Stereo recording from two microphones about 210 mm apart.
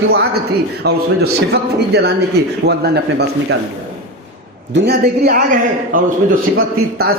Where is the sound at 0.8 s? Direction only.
50° right (ahead or behind).